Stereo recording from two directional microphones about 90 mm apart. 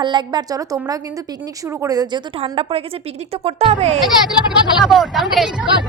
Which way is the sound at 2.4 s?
90° right.